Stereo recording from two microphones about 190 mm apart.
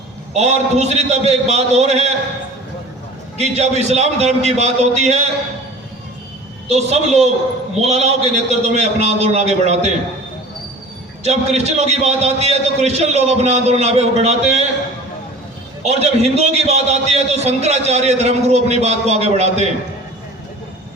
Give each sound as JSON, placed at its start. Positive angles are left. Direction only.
{"t": 0.3, "sound": "a man's voice", "side_deg": -35}
{"t": 3.3, "sound": "a man's voice", "side_deg": -35}
{"t": 6.7, "sound": "a man's voice", "side_deg": -35}
{"t": 11.2, "sound": "a man's voice", "side_deg": -35}
{"t": 15.8, "sound": "a man's voice", "side_deg": -35}